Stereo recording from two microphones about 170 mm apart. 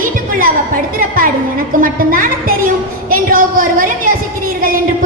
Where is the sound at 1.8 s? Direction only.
55° right (ahead or behind).